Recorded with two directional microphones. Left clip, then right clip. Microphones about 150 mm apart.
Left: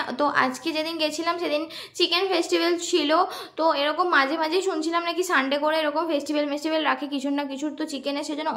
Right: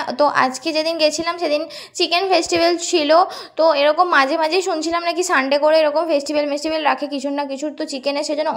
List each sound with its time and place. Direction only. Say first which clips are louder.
0.2 s a woman's voice: right 7 dB; 40° right (ahead or behind)
8.1 s a woman's voice: right 9 dB; 35° right (ahead or behind)